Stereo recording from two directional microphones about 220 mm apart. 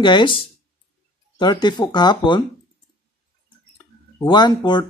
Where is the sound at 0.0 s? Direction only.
20° left (ahead or behind).